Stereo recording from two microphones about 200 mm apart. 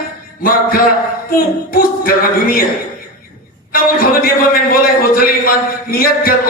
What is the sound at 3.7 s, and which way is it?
Speech, 45° left (ahead or behind).